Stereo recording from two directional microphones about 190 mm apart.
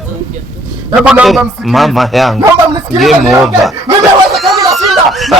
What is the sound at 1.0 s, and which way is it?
Speech, 5° right (ahead or behind).